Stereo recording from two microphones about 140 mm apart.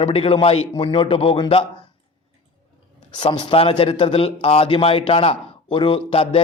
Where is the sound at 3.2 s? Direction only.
35° left (ahead or behind).